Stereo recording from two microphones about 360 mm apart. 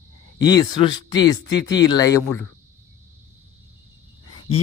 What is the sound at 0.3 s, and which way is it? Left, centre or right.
Speech, centre.